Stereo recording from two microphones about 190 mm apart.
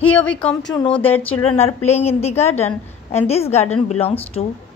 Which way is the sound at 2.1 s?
35° left (ahead or behind).